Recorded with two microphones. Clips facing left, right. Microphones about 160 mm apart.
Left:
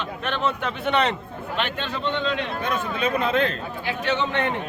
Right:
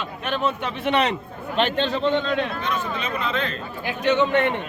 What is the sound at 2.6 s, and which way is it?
Speech, 55° left (ahead or behind).